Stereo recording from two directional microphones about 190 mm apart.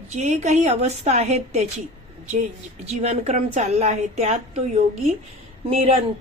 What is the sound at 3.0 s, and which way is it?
A woman's voice, 35° right (ahead or behind).